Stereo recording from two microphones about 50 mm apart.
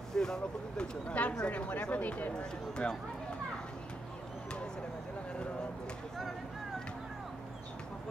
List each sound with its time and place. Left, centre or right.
0.1 s speech: centre
1.0 s speech: left
2.3 s speech: centre